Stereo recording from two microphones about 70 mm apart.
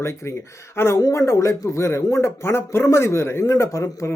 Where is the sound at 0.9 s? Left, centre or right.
Left.